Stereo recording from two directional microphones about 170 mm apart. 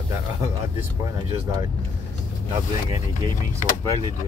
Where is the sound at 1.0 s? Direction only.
20° right (ahead or behind).